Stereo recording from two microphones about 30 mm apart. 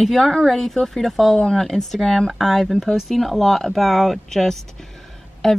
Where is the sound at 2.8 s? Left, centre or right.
Centre.